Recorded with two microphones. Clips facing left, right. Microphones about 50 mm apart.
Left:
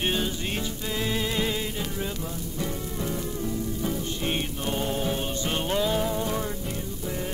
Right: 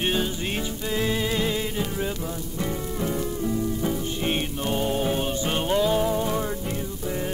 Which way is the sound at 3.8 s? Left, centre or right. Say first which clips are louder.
Right 3 dB; centre.